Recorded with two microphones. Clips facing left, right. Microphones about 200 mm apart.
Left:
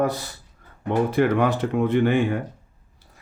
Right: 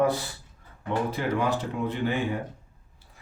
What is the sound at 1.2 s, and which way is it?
Speech, 65° left (ahead or behind).